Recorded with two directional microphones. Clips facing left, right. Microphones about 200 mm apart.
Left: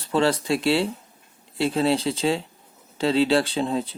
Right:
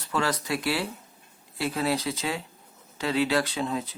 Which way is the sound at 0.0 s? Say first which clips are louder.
Left 7 dB; 30° left (ahead or behind).